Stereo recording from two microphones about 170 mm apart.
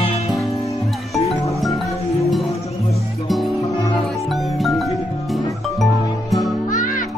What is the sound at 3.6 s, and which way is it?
Music, 20° left (ahead or behind).